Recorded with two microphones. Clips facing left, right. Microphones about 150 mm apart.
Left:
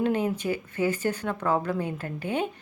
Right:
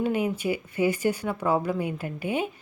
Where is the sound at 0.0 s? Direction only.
10° right (ahead or behind).